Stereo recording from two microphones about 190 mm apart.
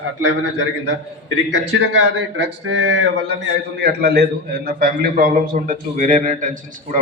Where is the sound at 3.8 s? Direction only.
60° right (ahead or behind).